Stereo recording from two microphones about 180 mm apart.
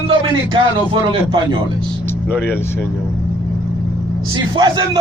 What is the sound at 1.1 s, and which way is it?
Speech, 25° right (ahead or behind).